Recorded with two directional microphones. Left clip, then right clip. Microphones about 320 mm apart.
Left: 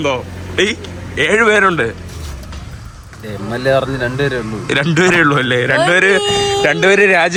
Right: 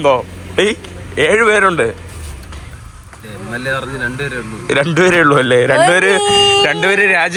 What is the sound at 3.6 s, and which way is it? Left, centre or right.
Speech, left.